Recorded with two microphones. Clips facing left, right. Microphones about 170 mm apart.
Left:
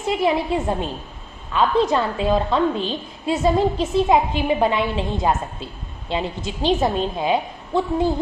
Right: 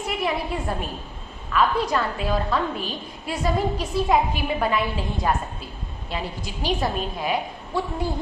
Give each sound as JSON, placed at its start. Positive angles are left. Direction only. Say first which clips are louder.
{"t": 0.0, "sound": "a woman's voice", "louder": "left 6 dB", "side_deg": 25}